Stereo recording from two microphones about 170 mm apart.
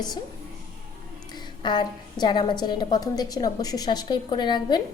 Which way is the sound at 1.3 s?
25° left (ahead or behind).